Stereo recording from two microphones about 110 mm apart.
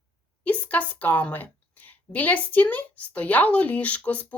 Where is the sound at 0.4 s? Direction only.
15° left (ahead or behind).